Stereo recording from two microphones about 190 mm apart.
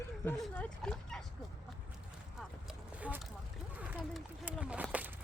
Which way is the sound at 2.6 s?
5° right (ahead or behind).